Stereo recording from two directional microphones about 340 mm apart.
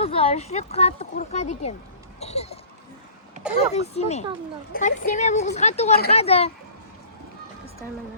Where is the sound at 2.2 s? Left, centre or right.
Centre.